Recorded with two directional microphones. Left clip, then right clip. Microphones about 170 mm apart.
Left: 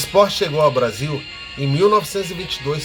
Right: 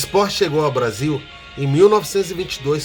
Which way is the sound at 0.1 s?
70° right (ahead or behind).